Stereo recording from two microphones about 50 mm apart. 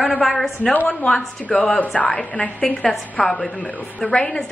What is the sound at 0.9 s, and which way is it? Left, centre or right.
A woman's voice, centre.